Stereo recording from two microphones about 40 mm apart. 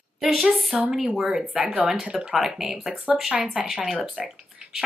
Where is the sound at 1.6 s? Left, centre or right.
Right.